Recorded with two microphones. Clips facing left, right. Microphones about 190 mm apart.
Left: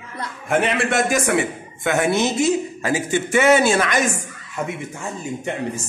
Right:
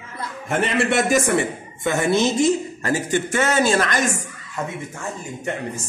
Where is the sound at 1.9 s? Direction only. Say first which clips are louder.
Even; 60° left (ahead or behind).